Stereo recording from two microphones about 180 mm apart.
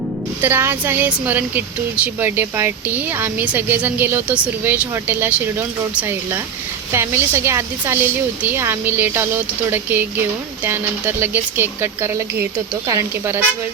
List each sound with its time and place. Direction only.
0.4 s speech: 10° right (ahead or behind)